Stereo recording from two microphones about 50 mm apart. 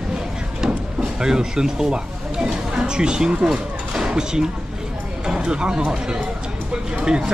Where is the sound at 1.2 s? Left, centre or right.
Centre.